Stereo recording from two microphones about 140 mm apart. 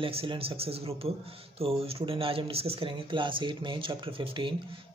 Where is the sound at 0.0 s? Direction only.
40° right (ahead or behind).